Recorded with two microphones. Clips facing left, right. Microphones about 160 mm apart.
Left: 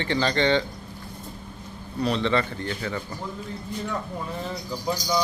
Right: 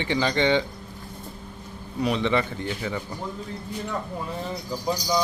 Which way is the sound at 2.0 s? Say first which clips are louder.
Even; 15° right (ahead or behind).